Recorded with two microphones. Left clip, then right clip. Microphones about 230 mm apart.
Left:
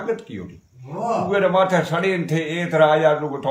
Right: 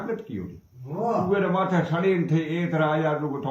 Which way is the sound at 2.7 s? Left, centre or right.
Left.